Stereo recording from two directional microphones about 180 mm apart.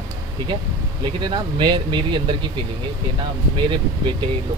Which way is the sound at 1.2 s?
25° right (ahead or behind).